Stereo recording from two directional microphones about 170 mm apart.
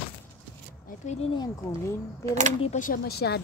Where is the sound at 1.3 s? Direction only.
20° left (ahead or behind).